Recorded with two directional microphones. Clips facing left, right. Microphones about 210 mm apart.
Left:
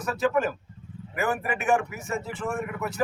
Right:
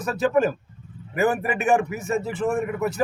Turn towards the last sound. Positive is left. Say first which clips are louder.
# right 6 dB
turn(degrees=-25)  # may be behind; listen again after turning